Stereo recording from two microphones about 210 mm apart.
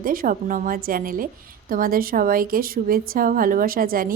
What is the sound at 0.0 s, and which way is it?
A woman's voice, 40° right (ahead or behind).